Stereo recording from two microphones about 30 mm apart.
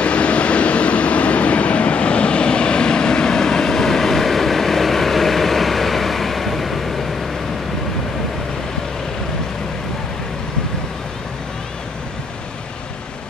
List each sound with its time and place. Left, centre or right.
0.0 s train: left; by 7.2 s centre